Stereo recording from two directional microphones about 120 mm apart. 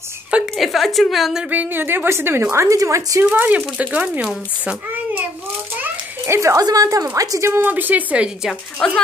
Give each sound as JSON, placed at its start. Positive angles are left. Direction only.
{"t": 0.3, "sound": "a woman's voice", "side_deg": 0}
{"t": 1.5, "sound": "a child's voice", "side_deg": -15}
{"t": 3.3, "sound": "a child's voice", "side_deg": -15}
{"t": 5.8, "sound": "a child's voice", "side_deg": -20}
{"t": 8.7, "sound": "speech", "side_deg": 5}